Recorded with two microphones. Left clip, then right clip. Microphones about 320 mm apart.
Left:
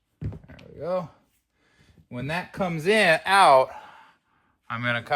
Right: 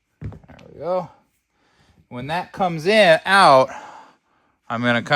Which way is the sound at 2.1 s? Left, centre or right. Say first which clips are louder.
Right 5 dB; right.